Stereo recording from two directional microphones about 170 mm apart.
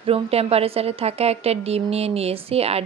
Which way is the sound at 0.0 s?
35° right (ahead or behind).